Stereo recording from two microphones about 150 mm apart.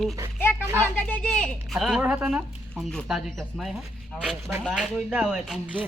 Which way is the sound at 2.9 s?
Centre (ahead or behind).